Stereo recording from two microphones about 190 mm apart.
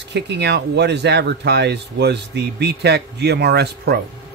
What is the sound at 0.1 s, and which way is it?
Speech, 65° right (ahead or behind).